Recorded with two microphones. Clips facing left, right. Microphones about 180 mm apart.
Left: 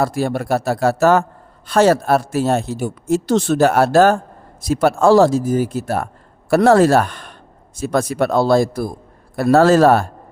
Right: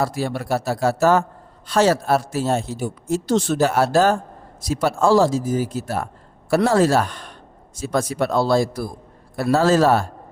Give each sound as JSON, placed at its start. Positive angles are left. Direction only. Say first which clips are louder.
{"t": 0.0, "sound": "speech", "louder": "left 4 dB", "side_deg": 50}
{"t": 1.6, "sound": "speech", "louder": "left 4 dB", "side_deg": 55}